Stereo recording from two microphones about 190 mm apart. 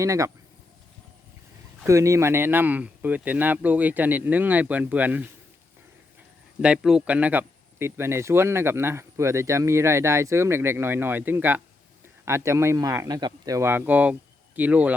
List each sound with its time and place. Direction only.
0.0 s a man's voice: 15° right (ahead or behind)
1.8 s a man's voice: 15° right (ahead or behind)
6.6 s a man's voice: 5° right (ahead or behind)